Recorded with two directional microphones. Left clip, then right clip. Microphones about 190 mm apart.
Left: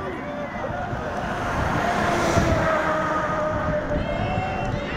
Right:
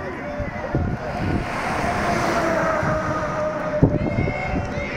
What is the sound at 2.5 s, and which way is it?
Music, 55° right (ahead or behind).